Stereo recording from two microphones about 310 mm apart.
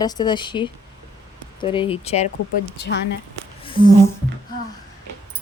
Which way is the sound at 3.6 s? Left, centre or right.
Centre.